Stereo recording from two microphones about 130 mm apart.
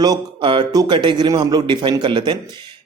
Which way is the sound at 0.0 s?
35° right (ahead or behind).